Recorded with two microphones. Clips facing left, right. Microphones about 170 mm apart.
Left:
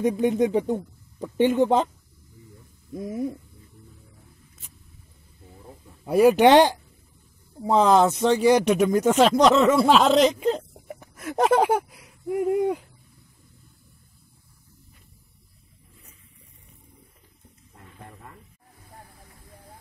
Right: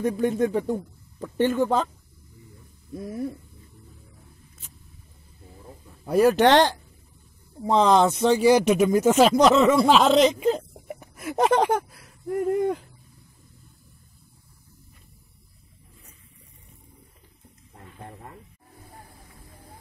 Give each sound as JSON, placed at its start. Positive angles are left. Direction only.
{"t": 0.0, "sound": "a man's voice", "side_deg": 20}
{"t": 2.9, "sound": "a man's voice", "side_deg": 20}
{"t": 6.0, "sound": "speech", "side_deg": 10}
{"t": 18.0, "sound": "wild animals", "side_deg": -35}